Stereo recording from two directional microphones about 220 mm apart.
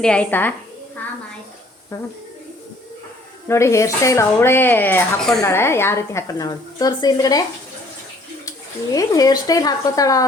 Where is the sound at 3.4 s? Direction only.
10° left (ahead or behind).